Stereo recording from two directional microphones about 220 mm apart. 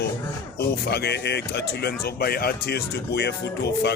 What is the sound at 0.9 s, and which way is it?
Speech, 50° left (ahead or behind).